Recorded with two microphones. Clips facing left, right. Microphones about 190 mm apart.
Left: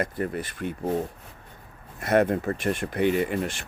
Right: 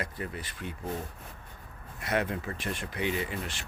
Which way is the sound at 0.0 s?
50° left (ahead or behind).